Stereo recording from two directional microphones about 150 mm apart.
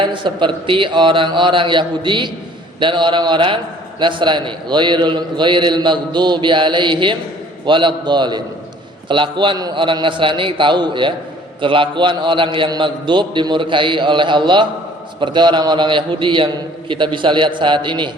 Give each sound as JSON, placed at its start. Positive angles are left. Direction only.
{"t": 0.0, "sound": "a man's voice", "side_deg": -30}